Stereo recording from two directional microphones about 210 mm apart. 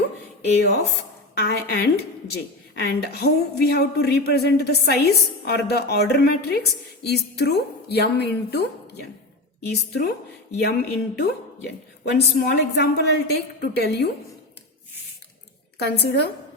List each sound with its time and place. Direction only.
1.4 s a woman's voice: 50° left (ahead or behind)
15.8 s a woman's voice: 50° left (ahead or behind)